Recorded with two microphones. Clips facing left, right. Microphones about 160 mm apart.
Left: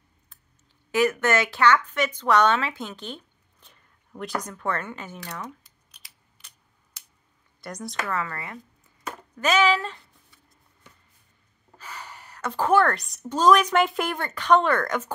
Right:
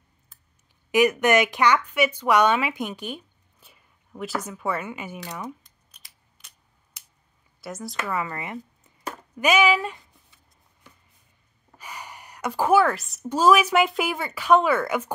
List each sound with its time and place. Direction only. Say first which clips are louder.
0.9 s speech: right 3 dB; 15° right (ahead or behind)
5.5 s scissors: right 5 dB; centre (ahead or behind)
7.6 s speech: right 1 dB; centre (ahead or behind)
8.1 s speech: right 4 dB; 15° right (ahead or behind)
11.8 s speech: right 1 dB; 15° right (ahead or behind)